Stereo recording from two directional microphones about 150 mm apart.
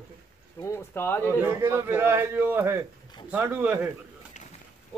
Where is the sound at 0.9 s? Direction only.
15° left (ahead or behind).